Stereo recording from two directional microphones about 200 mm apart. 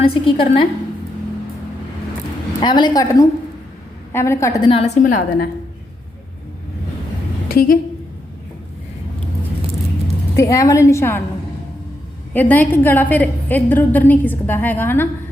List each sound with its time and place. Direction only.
0.0 s a woman's voice: 25° left (ahead or behind)
2.6 s a woman's voice: 20° left (ahead or behind)
5.0 s a woman's voice: 40° left (ahead or behind)
10.3 s a woman's voice: 15° left (ahead or behind)
12.3 s a woman's voice: 10° left (ahead or behind)